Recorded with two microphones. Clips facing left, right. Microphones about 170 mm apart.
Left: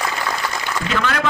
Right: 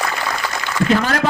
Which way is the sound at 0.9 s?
40° right (ahead or behind).